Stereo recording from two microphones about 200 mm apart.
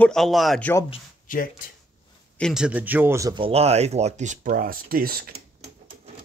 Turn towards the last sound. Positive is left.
turn(degrees=-50)  # may be behind; listen again after turning